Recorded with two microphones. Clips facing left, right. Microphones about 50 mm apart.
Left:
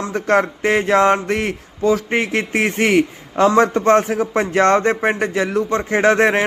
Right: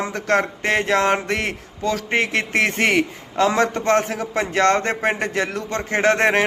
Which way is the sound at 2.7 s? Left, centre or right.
Right.